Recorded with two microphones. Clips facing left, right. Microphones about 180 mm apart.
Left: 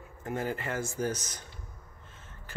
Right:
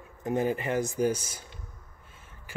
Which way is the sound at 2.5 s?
10° right (ahead or behind).